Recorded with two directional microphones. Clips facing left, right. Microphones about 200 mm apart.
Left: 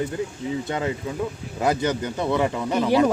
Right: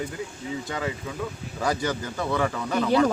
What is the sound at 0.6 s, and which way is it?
A man's voice, 25° left (ahead or behind).